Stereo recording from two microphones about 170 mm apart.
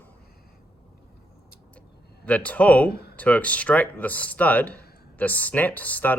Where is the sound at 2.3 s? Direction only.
10° left (ahead or behind).